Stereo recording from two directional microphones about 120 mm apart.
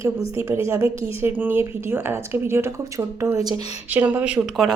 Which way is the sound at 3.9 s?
15° right (ahead or behind).